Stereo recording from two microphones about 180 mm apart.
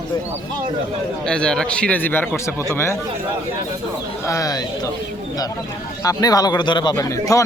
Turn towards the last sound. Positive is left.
turn(degrees=20)  # may be behind; listen again after turning